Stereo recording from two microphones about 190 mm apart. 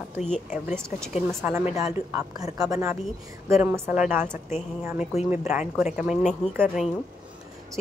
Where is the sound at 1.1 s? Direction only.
10° right (ahead or behind).